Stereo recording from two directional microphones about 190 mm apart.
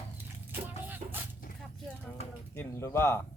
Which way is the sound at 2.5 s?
10° left (ahead or behind).